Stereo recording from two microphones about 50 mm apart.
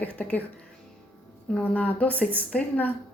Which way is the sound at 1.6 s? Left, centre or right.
Left.